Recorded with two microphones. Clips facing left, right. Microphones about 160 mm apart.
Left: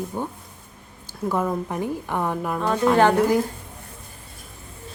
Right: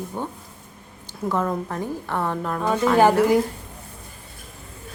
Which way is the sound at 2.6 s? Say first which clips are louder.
Right 1 dB; 5° right (ahead or behind).